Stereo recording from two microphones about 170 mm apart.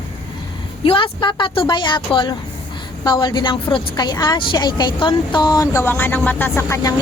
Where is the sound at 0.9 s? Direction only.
30° left (ahead or behind).